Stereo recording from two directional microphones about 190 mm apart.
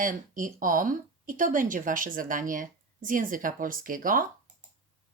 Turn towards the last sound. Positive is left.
turn(degrees=-45)  # may be behind; listen again after turning